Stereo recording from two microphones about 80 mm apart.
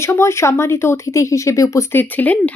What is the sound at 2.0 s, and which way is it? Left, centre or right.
Speech, left.